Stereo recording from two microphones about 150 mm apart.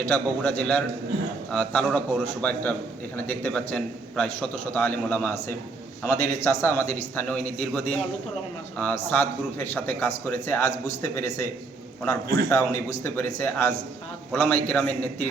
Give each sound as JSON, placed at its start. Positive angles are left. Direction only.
{"t": 0.0, "sound": "a man's voice", "side_deg": 10}
{"t": 12.5, "sound": "a man's voice", "side_deg": 20}